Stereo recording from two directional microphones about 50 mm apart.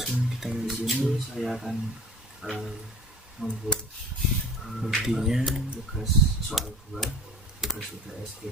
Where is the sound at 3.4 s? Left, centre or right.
Centre.